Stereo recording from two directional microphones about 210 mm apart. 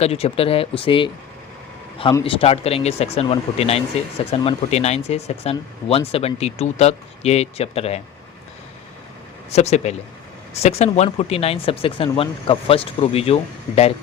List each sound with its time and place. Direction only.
0.0 s speech: 30° left (ahead or behind)
9.5 s speech: 30° left (ahead or behind)